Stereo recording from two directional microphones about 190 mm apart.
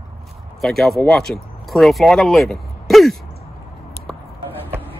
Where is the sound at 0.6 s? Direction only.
Centre (ahead or behind).